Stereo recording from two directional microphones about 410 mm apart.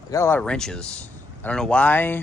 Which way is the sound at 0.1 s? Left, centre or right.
Centre.